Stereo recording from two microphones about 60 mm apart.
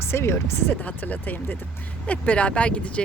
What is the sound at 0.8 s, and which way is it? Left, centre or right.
Speech, left.